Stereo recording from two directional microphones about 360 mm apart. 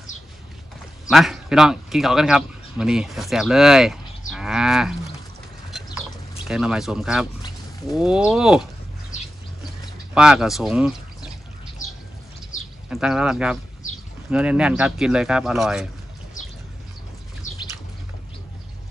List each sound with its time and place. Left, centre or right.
1.1 s speech: centre
4.3 s cattle: centre
6.4 s speech: centre
9.1 s a sound: left
10.1 s speech: centre
12.9 s speech: centre